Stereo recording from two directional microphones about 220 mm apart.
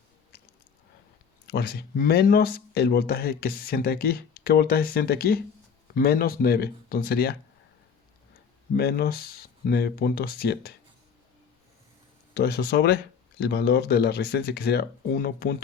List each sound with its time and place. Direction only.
1.5 s speech: 45° left (ahead or behind)
8.7 s speech: 45° left (ahead or behind)
12.3 s speech: 45° left (ahead or behind)